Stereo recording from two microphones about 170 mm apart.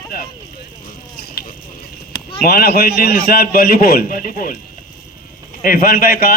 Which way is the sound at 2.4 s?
65° left (ahead or behind).